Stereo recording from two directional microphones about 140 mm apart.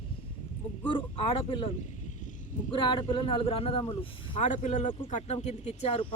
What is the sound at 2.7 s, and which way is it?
Speech, 35° left (ahead or behind).